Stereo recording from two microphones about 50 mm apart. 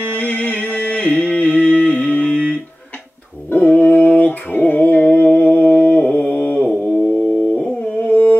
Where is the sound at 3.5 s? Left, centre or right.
Left.